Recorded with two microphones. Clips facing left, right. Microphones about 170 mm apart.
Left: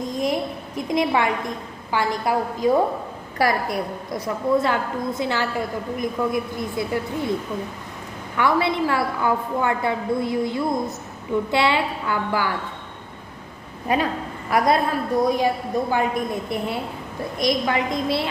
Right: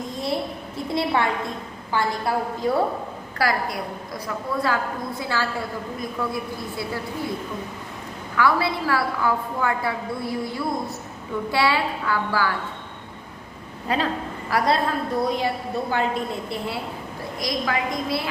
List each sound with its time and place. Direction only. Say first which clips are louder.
0.8 s a woman's voice: left 2 dB; 15° left (ahead or behind)
8.4 s a woman's voice: left 2 dB; 20° left (ahead or behind)
13.8 s a woman's voice: left 2 dB; 15° left (ahead or behind)